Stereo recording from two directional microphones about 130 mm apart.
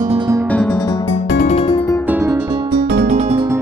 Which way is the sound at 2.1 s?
20° right (ahead or behind).